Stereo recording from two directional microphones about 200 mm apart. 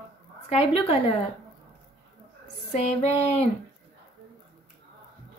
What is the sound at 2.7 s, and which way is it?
Female singing, 35° left (ahead or behind).